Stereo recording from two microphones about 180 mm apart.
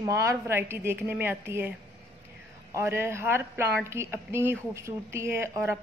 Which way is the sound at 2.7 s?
15° right (ahead or behind).